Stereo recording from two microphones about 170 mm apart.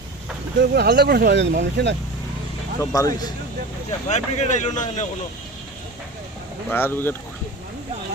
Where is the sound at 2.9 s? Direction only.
20° left (ahead or behind).